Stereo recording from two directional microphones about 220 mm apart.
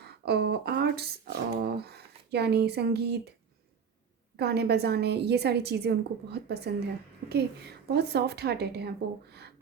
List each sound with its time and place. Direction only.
0.0 s speech: 45° right (ahead or behind)
4.4 s speech: 45° right (ahead or behind)